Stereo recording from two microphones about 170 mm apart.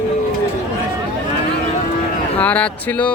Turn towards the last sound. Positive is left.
turn(degrees=10)  # may be behind; listen again after turning